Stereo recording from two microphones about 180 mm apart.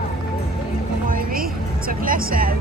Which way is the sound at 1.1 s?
55° right (ahead or behind).